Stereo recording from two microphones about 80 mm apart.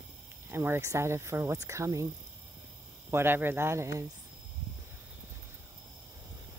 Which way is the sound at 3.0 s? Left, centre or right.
Right.